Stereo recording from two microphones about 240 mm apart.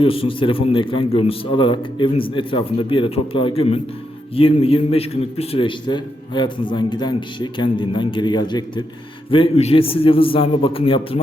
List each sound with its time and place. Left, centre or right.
0.0 s a man's voice: left